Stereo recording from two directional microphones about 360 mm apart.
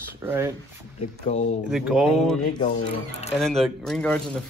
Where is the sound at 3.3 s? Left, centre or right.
Centre.